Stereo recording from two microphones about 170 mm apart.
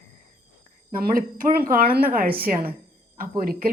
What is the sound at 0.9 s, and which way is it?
Speech, 55° right (ahead or behind).